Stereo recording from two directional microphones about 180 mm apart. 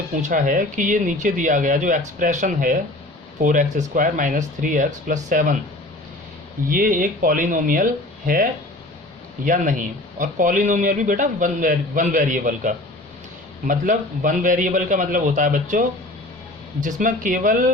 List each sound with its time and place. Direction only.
0.2 s a man's voice: 45° right (ahead or behind)
6.7 s a man's voice: 50° right (ahead or behind)
9.4 s a man's voice: 45° right (ahead or behind)